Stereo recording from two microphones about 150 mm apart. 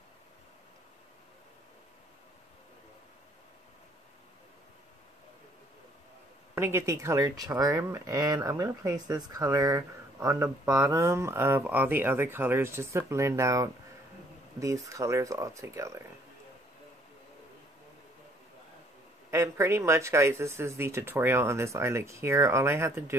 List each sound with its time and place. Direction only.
6.5 s speech: 15° right (ahead or behind)
19.3 s speech: 20° right (ahead or behind)